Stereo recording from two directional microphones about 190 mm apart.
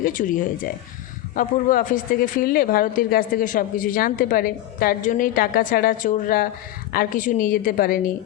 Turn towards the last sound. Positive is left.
turn(degrees=50)  # may be behind; listen again after turning